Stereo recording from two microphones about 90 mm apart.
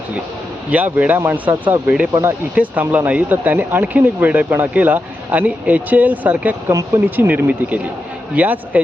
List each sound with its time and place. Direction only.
0.7 s speech: 15° right (ahead or behind)
6.7 s speech: 35° right (ahead or behind)
7.2 s speech: 20° right (ahead or behind)